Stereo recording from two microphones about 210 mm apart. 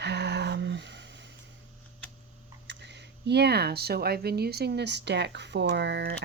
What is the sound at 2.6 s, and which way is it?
Speech, 55° right (ahead or behind).